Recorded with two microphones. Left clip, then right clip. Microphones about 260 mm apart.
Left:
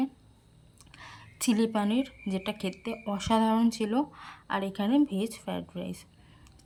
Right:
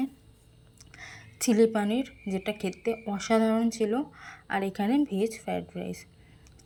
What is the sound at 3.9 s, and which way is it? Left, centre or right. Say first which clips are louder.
A woman's voice: left 1 dB; left.